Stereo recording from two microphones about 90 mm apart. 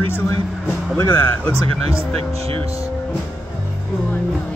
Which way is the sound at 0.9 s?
25° left (ahead or behind).